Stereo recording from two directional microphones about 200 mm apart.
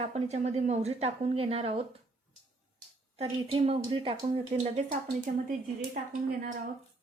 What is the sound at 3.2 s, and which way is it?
Speech, 30° right (ahead or behind).